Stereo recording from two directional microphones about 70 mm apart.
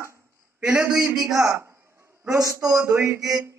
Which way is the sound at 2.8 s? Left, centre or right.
Right.